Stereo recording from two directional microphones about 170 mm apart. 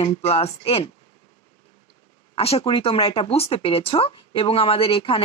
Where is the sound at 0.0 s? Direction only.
35° left (ahead or behind).